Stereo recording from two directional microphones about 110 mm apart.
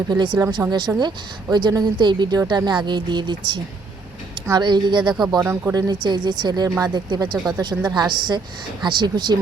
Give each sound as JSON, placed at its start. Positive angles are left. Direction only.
{"t": 0.1, "sound": "a woman's voice", "side_deg": -40}
{"t": 5.4, "sound": "speech", "side_deg": -20}
{"t": 5.7, "sound": "a woman's voice", "side_deg": -40}